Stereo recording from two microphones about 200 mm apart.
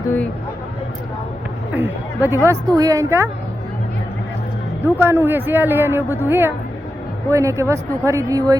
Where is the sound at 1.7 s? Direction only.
10° right (ahead or behind).